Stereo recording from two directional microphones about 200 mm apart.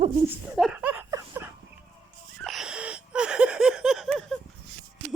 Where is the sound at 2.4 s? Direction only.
Centre (ahead or behind).